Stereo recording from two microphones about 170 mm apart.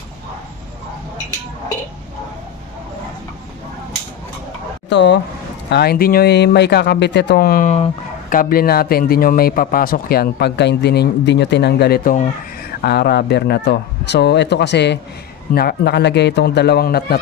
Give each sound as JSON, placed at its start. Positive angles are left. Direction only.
{"t": 4.8, "sound": "speech", "side_deg": 90}
{"t": 5.7, "sound": "a man's voice", "side_deg": 70}
{"t": 12.8, "sound": "speech", "side_deg": 70}
{"t": 15.5, "sound": "speech", "side_deg": 70}